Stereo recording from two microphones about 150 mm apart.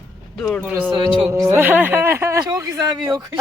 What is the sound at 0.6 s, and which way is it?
Speech, 10° right (ahead or behind).